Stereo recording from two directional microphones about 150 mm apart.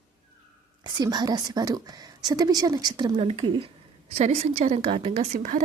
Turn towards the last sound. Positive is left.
turn(degrees=-55)  # may be behind; listen again after turning